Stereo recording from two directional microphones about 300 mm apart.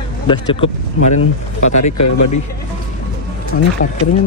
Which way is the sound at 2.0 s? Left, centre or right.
Left.